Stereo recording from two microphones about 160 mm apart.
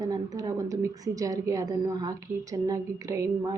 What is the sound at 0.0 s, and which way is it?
A woman's voice, 20° right (ahead or behind).